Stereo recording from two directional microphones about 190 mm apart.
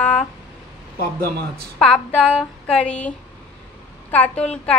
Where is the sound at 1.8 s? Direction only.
5° left (ahead or behind).